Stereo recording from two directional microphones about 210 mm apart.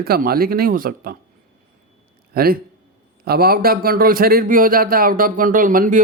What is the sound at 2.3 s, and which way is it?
A man's voice, 45° right (ahead or behind).